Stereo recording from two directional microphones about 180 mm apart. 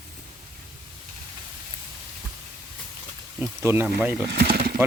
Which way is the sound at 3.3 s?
15° right (ahead or behind).